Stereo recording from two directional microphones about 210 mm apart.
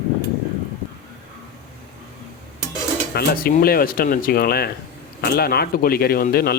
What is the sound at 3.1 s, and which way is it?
A man's voice, 45° left (ahead or behind).